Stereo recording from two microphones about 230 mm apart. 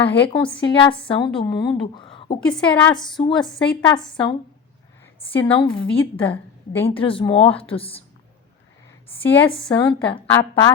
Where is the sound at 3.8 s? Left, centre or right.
Centre.